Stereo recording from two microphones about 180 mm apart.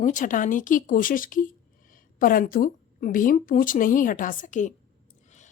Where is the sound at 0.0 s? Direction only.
45° left (ahead or behind).